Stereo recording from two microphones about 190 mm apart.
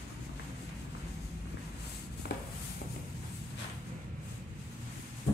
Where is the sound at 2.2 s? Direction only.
55° left (ahead or behind).